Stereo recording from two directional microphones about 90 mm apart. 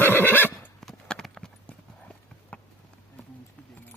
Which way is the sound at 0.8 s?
5° left (ahead or behind).